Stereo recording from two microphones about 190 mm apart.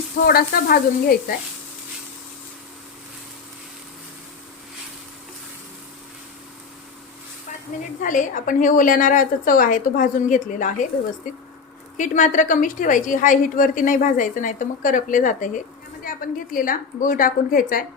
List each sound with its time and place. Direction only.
0.3 s a woman's voice: 50° left (ahead or behind)
8.0 s a woman's voice: 40° left (ahead or behind)
11.9 s a woman's voice: 40° left (ahead or behind)